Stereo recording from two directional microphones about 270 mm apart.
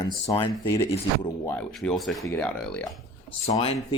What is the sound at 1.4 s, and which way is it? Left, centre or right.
Speech, centre.